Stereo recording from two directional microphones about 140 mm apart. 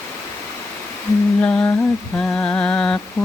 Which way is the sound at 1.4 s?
15° left (ahead or behind).